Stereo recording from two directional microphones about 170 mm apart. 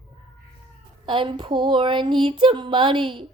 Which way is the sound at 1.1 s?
30° right (ahead or behind).